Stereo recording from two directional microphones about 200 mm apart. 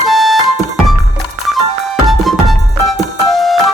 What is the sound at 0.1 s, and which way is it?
Music, centre (ahead or behind).